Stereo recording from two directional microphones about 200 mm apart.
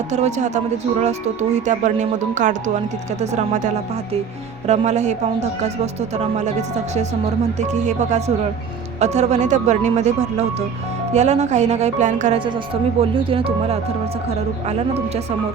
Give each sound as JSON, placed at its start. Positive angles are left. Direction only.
{"t": 0.1, "sound": "speech", "side_deg": -35}
{"t": 7.6, "sound": "speech", "side_deg": -35}
{"t": 13.0, "sound": "speech", "side_deg": -30}